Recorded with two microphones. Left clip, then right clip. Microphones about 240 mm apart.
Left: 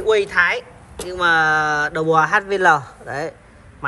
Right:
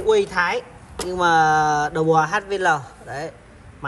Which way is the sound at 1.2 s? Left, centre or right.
Centre.